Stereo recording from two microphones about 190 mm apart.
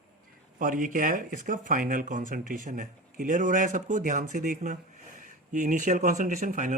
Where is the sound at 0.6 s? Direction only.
45° right (ahead or behind).